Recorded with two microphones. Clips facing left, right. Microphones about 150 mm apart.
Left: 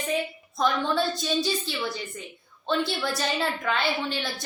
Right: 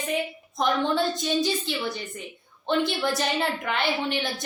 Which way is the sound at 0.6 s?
20° right (ahead or behind).